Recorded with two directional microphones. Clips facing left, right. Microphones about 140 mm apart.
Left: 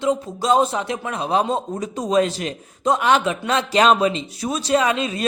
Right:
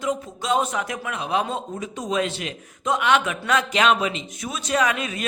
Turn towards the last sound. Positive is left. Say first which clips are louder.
# left 4 dB
turn(degrees=30)  # may be behind; listen again after turning